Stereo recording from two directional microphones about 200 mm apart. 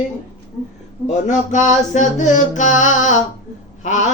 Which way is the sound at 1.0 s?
35° left (ahead or behind).